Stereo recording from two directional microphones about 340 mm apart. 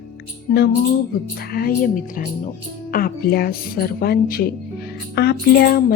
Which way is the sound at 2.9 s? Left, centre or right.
Left.